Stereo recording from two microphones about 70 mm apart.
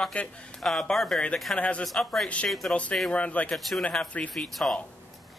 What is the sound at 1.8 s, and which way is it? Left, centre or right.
Speech, centre.